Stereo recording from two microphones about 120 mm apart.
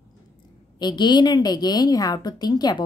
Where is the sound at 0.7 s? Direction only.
40° left (ahead or behind).